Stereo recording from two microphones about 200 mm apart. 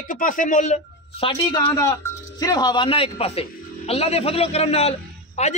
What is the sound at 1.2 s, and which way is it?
A man's voice, 30° left (ahead or behind).